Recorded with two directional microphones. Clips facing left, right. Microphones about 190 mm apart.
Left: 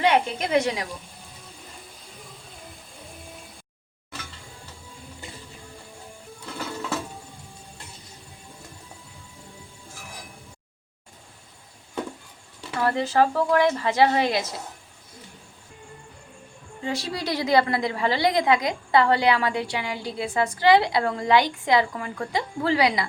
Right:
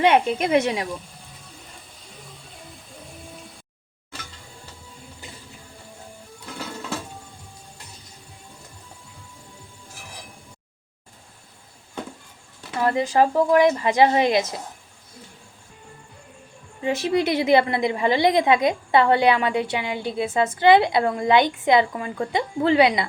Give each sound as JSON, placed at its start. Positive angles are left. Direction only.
{"t": 0.0, "sound": "a woman's voice", "side_deg": -20}
{"t": 12.8, "sound": "a woman's voice", "side_deg": -15}
{"t": 16.8, "sound": "a woman's voice", "side_deg": -20}